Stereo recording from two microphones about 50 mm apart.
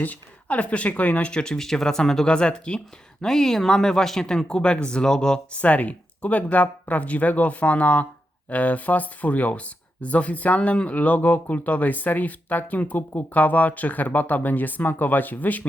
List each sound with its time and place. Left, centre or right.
0.0 s speech: left
1.5 s speech: centre
5.5 s speech: left